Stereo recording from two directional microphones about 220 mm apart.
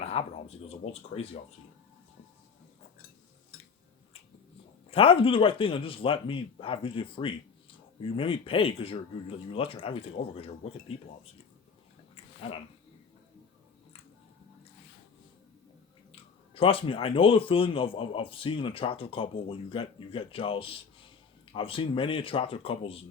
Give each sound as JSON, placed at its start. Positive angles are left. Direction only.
{"t": 0.0, "sound": "speech", "side_deg": 25}
{"t": 4.9, "sound": "a man's voice", "side_deg": 25}
{"t": 12.1, "sound": "a sound", "side_deg": 25}
{"t": 16.1, "sound": "a man's voice", "side_deg": 25}